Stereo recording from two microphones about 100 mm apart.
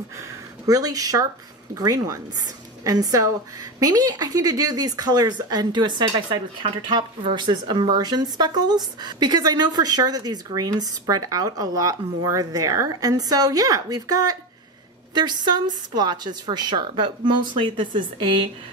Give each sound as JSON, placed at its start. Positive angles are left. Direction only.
{"t": 0.2, "sound": "a woman's voice", "side_deg": -35}
{"t": 6.6, "sound": "a woman's voice", "side_deg": -55}